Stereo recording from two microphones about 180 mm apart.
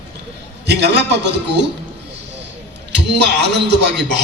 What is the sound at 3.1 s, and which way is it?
A man's voice, 70° right (ahead or behind).